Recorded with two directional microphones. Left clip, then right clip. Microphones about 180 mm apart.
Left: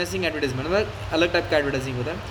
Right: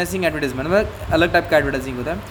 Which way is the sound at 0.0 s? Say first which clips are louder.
Right 4 dB; 40° right (ahead or behind).